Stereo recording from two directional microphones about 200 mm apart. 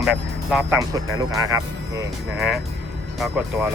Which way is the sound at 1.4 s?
15° right (ahead or behind).